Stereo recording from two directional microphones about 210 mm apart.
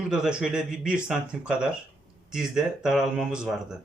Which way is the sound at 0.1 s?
5° right (ahead or behind).